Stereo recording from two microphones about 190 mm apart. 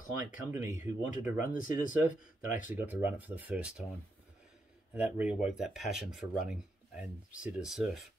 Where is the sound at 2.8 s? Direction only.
10° right (ahead or behind).